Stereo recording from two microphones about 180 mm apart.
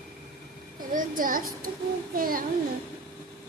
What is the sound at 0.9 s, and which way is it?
A child's voice, 50° right (ahead or behind).